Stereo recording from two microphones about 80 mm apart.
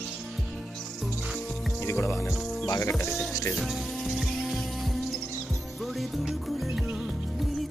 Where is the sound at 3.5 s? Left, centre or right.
Centre.